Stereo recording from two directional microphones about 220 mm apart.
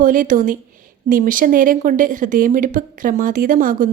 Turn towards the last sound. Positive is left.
turn(degrees=-40)  # may be behind; listen again after turning